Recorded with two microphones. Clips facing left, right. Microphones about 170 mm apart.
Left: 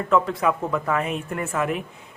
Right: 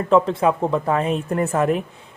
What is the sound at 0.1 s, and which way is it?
A woman's voice, 30° right (ahead or behind).